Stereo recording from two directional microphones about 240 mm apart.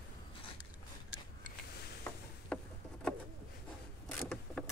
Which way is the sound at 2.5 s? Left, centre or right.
Centre.